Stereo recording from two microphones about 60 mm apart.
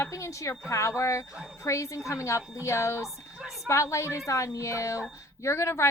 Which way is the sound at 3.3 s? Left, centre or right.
Centre.